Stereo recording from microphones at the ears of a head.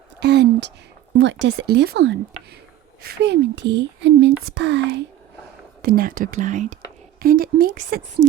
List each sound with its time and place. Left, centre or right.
0.2 s speech: right